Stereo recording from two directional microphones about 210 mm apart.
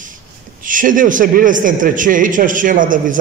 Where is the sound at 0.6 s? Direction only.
40° right (ahead or behind).